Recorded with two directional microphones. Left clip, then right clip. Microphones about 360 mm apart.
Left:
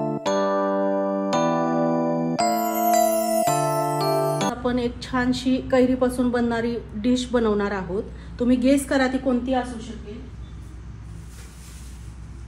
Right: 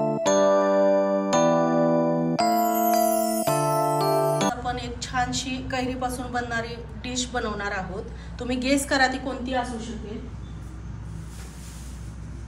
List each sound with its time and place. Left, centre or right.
0.0 s music: centre
4.6 s a woman's voice: centre